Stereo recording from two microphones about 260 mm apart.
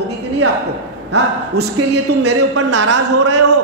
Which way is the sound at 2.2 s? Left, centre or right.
Right.